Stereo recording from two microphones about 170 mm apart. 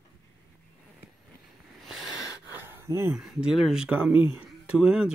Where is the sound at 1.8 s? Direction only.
Centre (ahead or behind).